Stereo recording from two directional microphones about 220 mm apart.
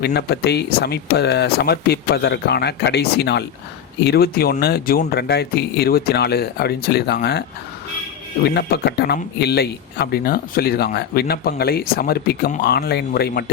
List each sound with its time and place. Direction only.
0.0 s speech: 50° left (ahead or behind)
8.5 s speech: 45° left (ahead or behind)